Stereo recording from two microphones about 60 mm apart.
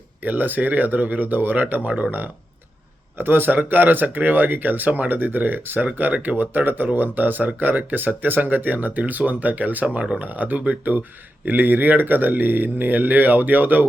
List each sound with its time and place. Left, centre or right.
0.2 s speech: right